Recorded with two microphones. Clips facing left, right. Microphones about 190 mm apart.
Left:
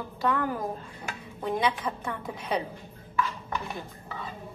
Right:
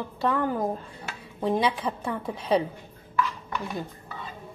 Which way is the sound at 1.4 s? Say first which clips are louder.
Right 3 dB; 30° right (ahead or behind).